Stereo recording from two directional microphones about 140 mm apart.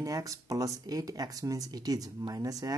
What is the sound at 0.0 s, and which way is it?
Speech, 25° right (ahead or behind).